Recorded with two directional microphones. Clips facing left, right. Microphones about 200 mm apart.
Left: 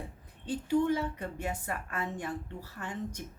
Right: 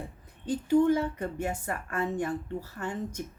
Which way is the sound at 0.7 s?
45° right (ahead or behind).